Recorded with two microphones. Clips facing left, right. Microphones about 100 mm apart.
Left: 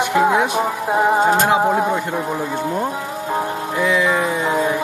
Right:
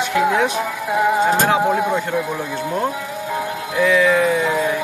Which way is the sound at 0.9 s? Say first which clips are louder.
Left 1 dB; 30° left (ahead or behind).